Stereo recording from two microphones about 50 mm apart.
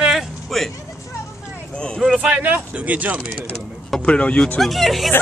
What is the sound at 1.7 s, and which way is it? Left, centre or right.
Speech, centre.